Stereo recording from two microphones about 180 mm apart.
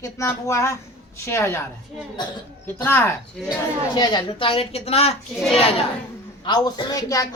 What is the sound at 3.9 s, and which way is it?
Speech, 25° left (ahead or behind).